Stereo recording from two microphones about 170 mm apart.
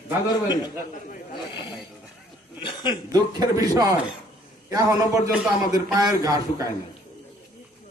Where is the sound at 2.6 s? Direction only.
25° left (ahead or behind).